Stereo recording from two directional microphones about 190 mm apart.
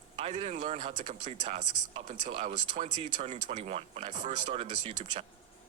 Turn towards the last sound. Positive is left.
turn(degrees=-30)  # may be behind; listen again after turning